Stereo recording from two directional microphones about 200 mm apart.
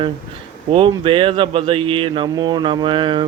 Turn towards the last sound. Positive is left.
turn(degrees=-25)  # may be behind; listen again after turning